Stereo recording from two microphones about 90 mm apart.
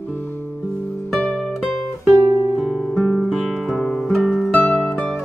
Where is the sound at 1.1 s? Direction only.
10° left (ahead or behind).